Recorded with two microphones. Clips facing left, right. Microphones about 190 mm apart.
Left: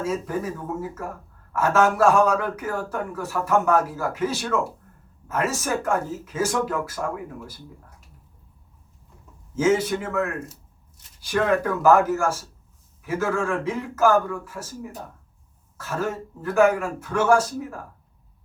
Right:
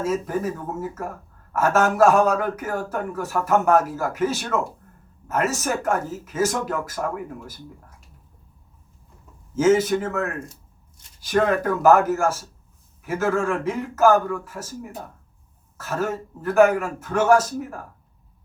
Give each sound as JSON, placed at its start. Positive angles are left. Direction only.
{"t": 0.3, "sound": "speech", "side_deg": -45}
{"t": 9.6, "sound": "speech", "side_deg": -45}
{"t": 10.4, "sound": "shuffling cards", "side_deg": 5}
{"t": 11.3, "sound": "speech", "side_deg": -45}